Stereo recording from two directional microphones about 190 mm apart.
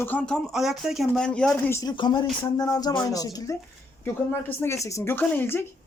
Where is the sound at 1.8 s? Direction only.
25° left (ahead or behind).